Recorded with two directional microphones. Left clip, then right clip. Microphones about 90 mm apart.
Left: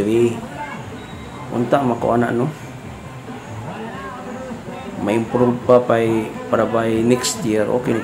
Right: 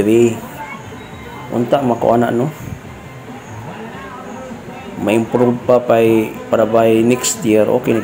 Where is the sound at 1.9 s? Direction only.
20° right (ahead or behind).